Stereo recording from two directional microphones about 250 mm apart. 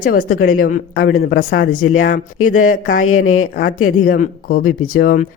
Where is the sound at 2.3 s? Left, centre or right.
Left.